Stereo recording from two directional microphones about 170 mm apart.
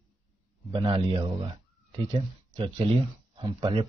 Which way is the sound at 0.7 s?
30° right (ahead or behind).